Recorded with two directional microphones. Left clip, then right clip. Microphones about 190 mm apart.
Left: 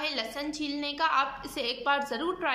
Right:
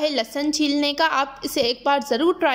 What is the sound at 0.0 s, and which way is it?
A woman's voice, 40° right (ahead or behind).